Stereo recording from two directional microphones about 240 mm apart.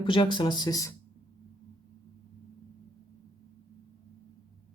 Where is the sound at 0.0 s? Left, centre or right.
Left.